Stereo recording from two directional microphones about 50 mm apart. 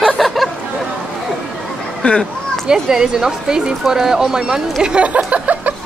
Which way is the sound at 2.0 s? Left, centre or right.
Left.